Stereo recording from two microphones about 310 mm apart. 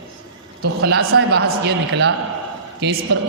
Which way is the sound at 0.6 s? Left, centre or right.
Right.